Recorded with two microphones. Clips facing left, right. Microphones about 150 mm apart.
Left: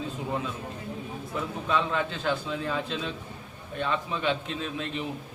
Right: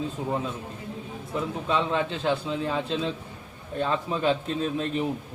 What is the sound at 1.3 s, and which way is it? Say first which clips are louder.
A man's voice: right 2 dB; 25° right (ahead or behind).